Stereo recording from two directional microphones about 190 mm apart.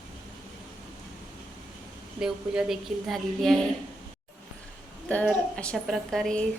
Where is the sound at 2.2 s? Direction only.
5° right (ahead or behind).